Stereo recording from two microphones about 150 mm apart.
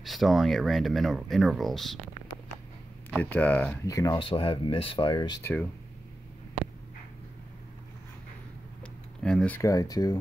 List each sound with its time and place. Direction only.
0.0 s speech: centre (ahead or behind)
3.1 s speech: 10° left (ahead or behind)
3.8 s speech: 20° left (ahead or behind)
4.2 s speech: 35° left (ahead or behind)
5.4 s speech: 15° left (ahead or behind)
8.8 s a sound: 5° left (ahead or behind)
9.6 s speech: 20° left (ahead or behind)